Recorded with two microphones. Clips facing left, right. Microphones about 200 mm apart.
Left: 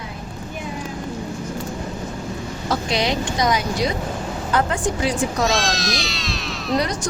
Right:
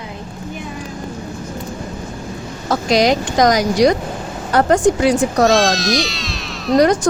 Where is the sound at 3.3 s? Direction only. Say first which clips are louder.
Right 9 dB; 90° right.